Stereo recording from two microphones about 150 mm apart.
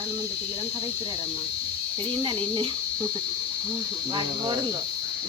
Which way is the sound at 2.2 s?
30° right (ahead or behind).